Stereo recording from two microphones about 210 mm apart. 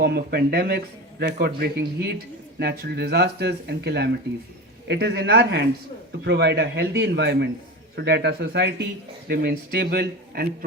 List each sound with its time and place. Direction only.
0.0 s speech: 50° right (ahead or behind)